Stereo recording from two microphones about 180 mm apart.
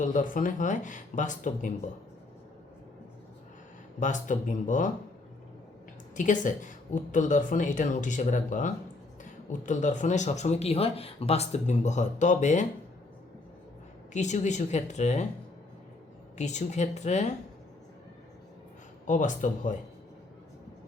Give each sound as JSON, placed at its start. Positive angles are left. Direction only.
{"t": 0.0, "sound": "a woman's voice", "side_deg": 45}
{"t": 4.0, "sound": "a woman's voice", "side_deg": 45}
{"t": 6.1, "sound": "a woman's voice", "side_deg": 45}
{"t": 14.1, "sound": "speech", "side_deg": 40}
{"t": 16.4, "sound": "speech", "side_deg": 40}
{"t": 19.0, "sound": "a woman's voice", "side_deg": 45}